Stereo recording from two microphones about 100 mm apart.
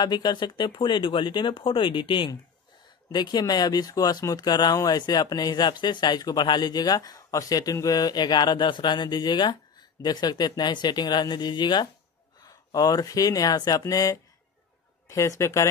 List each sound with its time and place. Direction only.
0.0 s speech: 45° left (ahead or behind); by 15.7 s 30° left (ahead or behind)